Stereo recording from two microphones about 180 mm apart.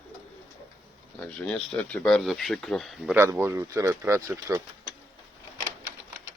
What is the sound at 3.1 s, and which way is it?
Speech, 15° right (ahead or behind).